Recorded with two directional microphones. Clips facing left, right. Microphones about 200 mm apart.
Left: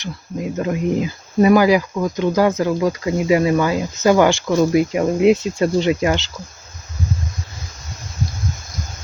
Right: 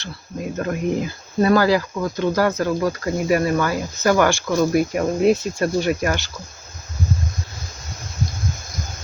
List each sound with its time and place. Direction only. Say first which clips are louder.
0.5 s speech: left 2 dB; 15° left (ahead or behind)